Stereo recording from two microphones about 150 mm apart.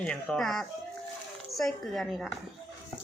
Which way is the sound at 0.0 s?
5° left (ahead or behind).